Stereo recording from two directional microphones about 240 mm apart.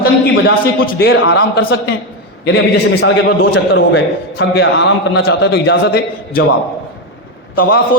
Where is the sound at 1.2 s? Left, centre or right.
Left.